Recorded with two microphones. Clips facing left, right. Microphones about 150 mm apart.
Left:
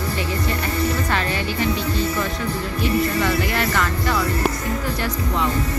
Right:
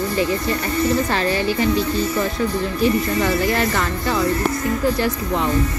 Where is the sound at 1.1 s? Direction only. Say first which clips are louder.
Right 3 dB; 35° right (ahead or behind).